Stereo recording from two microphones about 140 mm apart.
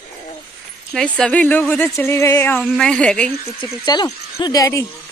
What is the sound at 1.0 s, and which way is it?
Speech, 5° left (ahead or behind).